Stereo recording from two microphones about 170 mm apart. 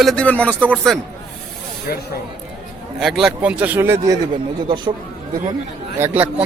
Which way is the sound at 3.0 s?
Centre (ahead or behind).